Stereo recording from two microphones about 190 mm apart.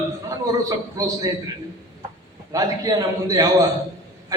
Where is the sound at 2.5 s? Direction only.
20° right (ahead or behind).